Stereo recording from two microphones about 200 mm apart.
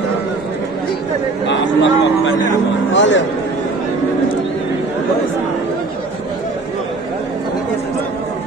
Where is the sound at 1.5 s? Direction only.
65° left (ahead or behind).